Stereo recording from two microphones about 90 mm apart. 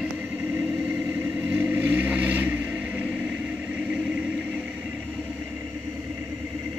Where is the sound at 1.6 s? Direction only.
20° right (ahead or behind).